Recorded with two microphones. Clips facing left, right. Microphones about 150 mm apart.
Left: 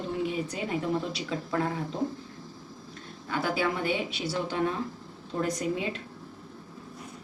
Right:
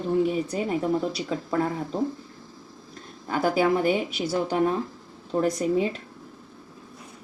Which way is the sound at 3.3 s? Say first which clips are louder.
Right 6 dB; 45° right (ahead or behind).